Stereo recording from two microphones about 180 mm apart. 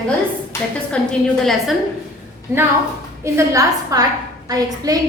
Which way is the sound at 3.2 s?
15° right (ahead or behind).